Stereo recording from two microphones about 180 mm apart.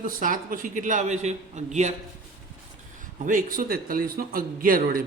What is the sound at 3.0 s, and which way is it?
A man's voice, 45° right (ahead or behind).